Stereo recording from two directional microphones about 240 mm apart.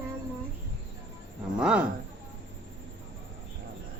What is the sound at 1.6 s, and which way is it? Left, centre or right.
Speech, centre.